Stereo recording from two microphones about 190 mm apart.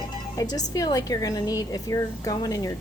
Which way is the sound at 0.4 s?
20° left (ahead or behind).